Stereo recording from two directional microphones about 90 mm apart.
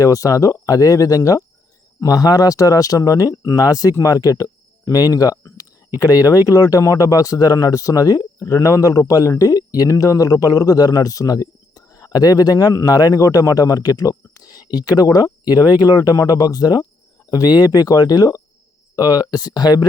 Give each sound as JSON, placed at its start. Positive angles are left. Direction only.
{"t": 0.0, "sound": "speech", "side_deg": 40}